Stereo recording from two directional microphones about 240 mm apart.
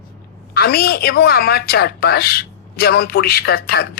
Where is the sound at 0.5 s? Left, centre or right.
Left.